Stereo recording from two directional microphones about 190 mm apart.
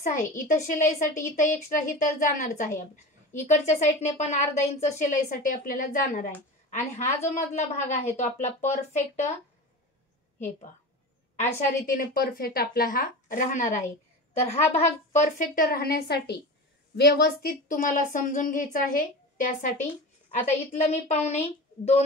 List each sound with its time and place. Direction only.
0.0 s a woman's voice: 45° left (ahead or behind)
11.3 s a woman's voice: 40° left (ahead or behind)